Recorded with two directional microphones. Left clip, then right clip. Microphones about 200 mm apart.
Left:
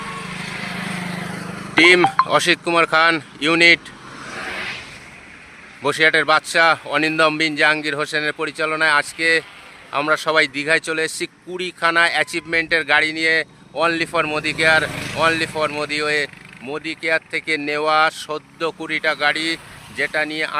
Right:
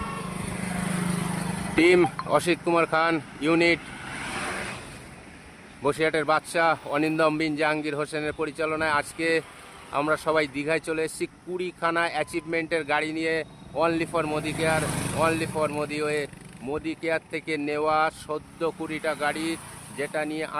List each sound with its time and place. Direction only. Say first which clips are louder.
0.6 s vehicle: left 3 dB; 50° right (ahead or behind)
1.7 s speech: left 8 dB; centre (ahead or behind)
4.4 s vehicle: left 6 dB; 40° right (ahead or behind)
5.8 s speech: left 8 dB; centre (ahead or behind)